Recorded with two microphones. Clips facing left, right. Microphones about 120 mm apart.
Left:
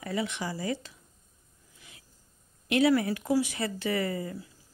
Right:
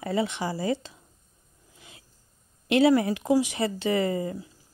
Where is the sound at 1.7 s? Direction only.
25° right (ahead or behind).